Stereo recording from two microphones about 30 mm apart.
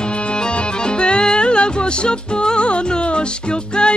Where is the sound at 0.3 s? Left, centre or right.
Left.